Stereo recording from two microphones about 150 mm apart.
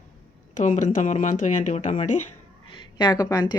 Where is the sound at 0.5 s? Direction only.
55° left (ahead or behind).